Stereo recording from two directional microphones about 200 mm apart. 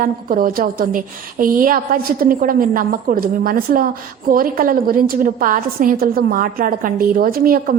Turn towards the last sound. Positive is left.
turn(degrees=-45)  # may be behind; listen again after turning